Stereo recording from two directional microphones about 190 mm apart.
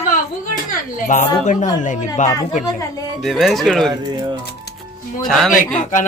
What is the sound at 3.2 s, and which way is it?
Speech, centre (ahead or behind).